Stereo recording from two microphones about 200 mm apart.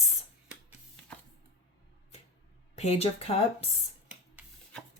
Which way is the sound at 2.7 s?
30° left (ahead or behind).